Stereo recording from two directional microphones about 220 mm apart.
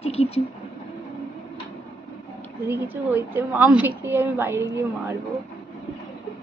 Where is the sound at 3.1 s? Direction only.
10° right (ahead or behind).